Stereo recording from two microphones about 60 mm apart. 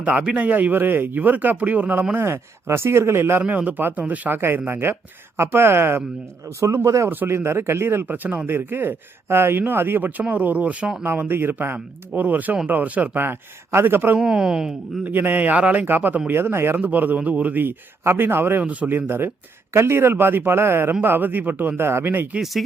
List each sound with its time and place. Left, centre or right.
0.0 s speech: right
2.1 s speech: right
3.6 s speech: right
4.4 s speech: right
6.8 s speech: right
8.0 s speech: right
11.0 s speech: right
14.2 s speech: centre
15.0 s speech: right
16.4 s speech: right
16.8 s speech: right
18.6 s speech: right
18.9 s speech: right